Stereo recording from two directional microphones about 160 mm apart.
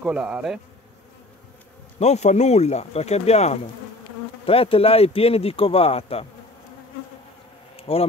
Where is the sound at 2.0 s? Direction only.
45° left (ahead or behind).